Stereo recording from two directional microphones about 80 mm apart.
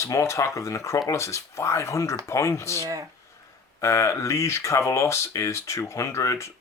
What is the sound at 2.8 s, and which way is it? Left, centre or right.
Speech, right.